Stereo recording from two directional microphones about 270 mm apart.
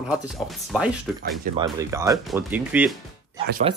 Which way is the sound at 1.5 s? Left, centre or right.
Centre.